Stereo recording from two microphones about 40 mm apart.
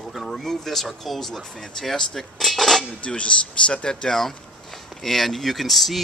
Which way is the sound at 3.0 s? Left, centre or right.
Left.